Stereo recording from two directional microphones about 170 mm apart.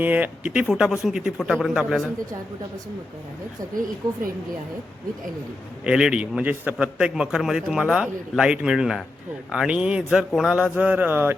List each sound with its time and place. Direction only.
0.0 s a man's voice: 10° right (ahead or behind)
5.8 s a man's voice: 5° right (ahead or behind)